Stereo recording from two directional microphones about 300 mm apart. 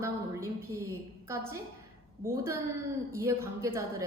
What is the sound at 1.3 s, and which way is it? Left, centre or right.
A woman's voice, centre.